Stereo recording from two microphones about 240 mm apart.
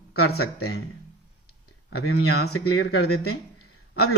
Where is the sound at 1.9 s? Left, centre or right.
Left.